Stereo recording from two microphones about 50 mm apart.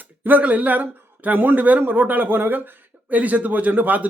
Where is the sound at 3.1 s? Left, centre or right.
Right.